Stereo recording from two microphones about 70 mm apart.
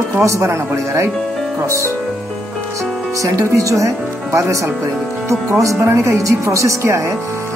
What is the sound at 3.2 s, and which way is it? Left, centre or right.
Speech, right.